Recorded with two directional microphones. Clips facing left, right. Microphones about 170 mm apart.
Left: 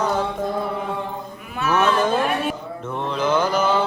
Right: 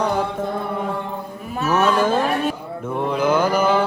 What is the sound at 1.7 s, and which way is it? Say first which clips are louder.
Speech: right 1 dB; 10° right (ahead or behind).